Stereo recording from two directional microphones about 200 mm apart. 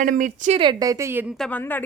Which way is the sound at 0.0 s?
40° right (ahead or behind).